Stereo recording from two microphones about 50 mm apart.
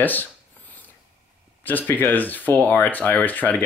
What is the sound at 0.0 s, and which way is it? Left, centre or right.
Speech, left.